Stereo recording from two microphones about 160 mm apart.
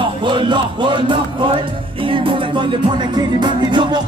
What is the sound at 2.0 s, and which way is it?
Music, 35° right (ahead or behind).